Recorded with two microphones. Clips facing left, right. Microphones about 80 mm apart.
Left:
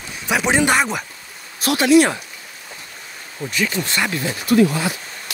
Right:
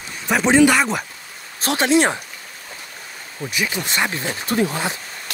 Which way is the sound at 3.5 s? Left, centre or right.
Centre.